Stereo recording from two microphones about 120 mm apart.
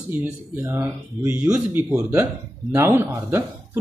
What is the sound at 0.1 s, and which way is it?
Speech, 20° right (ahead or behind).